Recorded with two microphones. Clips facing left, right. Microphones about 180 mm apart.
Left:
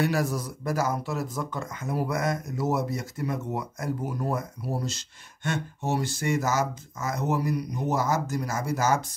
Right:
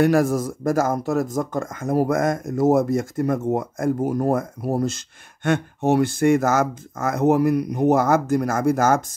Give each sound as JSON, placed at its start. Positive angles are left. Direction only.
{"t": 0.0, "sound": "speech", "side_deg": -50}